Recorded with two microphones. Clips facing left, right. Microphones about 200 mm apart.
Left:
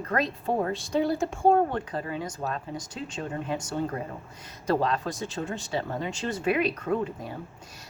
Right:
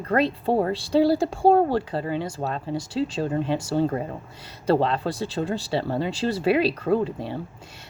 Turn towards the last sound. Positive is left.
turn(degrees=-30)  # may be behind; listen again after turning